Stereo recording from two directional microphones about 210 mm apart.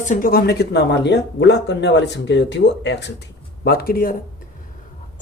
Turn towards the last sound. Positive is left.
turn(degrees=45)  # may be behind; listen again after turning